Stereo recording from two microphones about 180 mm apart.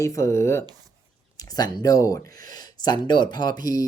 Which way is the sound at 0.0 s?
15° left (ahead or behind).